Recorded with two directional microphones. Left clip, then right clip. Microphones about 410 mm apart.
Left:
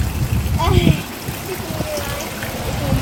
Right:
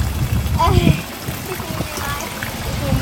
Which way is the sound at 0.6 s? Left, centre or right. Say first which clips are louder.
Right 2 dB; centre.